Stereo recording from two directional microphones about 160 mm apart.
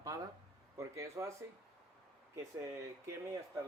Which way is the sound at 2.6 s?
20° right (ahead or behind).